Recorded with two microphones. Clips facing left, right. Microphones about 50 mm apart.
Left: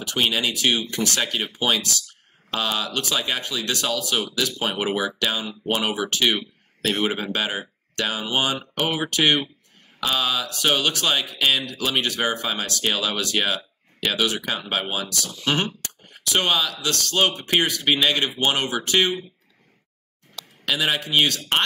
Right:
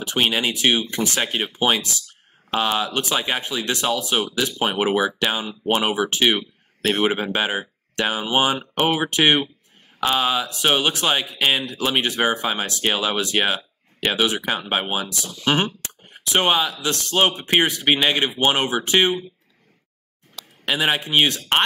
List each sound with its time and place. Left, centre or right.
0.0 s speech: right
20.6 s speech: right